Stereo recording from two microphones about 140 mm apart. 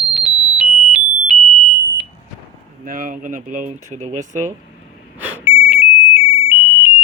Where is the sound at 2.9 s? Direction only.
75° right (ahead or behind); by 4.1 s 60° right (ahead or behind).